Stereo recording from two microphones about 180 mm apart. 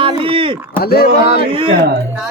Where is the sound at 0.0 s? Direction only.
30° right (ahead or behind).